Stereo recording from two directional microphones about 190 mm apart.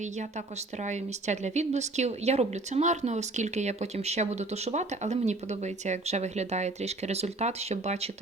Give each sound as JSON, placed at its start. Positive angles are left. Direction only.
{"t": 0.8, "sound": "a woman's voice", "side_deg": -40}